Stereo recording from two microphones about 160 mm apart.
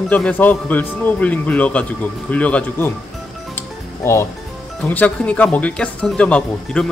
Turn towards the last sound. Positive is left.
turn(degrees=5)  # may be behind; listen again after turning